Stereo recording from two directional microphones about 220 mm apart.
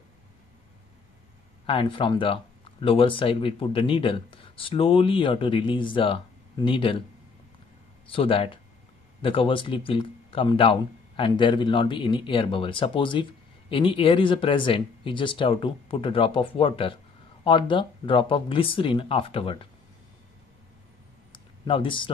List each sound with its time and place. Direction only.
1.7 s speech: 25° left (ahead or behind)
8.1 s speech: 25° left (ahead or behind)
21.3 s a sound: 25° left (ahead or behind)